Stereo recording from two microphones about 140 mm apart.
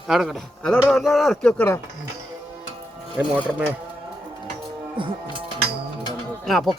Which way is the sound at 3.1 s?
10° right (ahead or behind).